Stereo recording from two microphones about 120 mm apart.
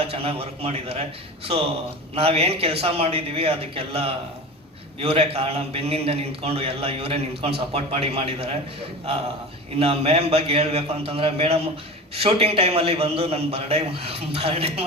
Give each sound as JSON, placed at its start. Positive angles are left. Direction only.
{"t": 0.0, "sound": "a man's voice", "side_deg": -55}
{"t": 2.1, "sound": "a man's voice", "side_deg": -55}
{"t": 9.7, "sound": "a man's voice", "side_deg": -55}